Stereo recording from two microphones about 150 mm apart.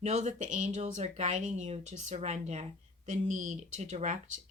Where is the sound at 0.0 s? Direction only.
50° right (ahead or behind).